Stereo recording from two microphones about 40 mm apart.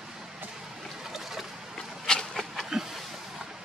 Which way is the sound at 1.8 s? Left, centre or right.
Centre.